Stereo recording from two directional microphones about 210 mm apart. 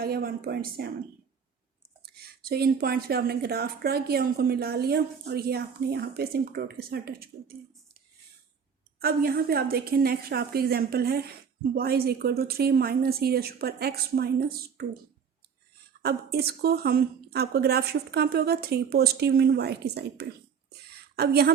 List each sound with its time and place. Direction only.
0.0 s a woman's voice: 45° right (ahead or behind)
2.4 s a woman's voice: 45° right (ahead or behind)
9.0 s a woman's voice: 45° right (ahead or behind)
16.0 s a woman's voice: 50° right (ahead or behind)